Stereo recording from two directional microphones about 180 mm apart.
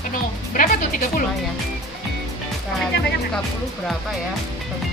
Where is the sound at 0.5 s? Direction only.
50° left (ahead or behind).